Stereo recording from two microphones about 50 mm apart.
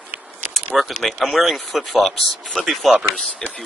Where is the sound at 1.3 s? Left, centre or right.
Centre.